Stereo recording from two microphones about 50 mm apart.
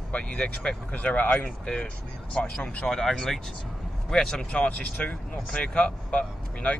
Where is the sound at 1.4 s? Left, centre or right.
Centre.